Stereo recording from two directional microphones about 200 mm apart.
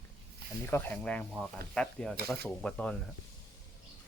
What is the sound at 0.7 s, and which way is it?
Speech, 10° left (ahead or behind).